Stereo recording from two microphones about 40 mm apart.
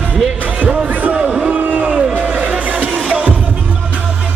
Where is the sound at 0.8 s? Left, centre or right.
Right.